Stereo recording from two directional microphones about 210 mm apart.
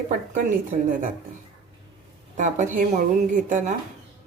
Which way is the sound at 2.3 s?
35° right (ahead or behind).